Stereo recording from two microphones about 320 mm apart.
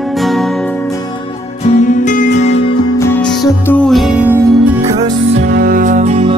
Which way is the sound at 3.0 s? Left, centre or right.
Centre.